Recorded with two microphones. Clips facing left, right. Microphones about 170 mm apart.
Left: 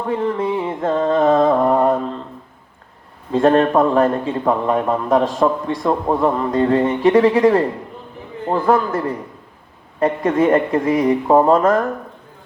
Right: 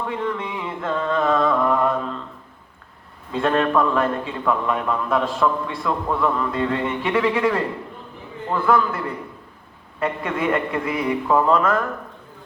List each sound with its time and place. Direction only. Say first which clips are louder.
0.0 s mantra: left 6 dB; 35° left (ahead or behind)
3.3 s a man's voice: left 6 dB; 40° left (ahead or behind)